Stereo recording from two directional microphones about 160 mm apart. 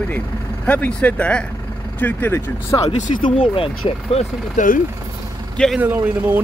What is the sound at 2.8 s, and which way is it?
Speech, 45° left (ahead or behind).